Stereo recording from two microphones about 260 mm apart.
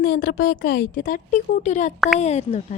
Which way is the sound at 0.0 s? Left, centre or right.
Left.